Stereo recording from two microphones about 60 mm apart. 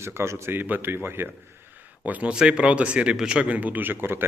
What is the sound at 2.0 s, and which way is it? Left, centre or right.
A man's voice, right.